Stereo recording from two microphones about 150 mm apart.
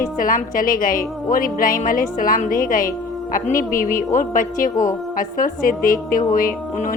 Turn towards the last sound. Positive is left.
turn(degrees=65)  # may be behind; listen again after turning